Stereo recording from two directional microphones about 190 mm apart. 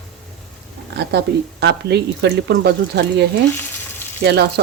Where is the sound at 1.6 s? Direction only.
60° right (ahead or behind).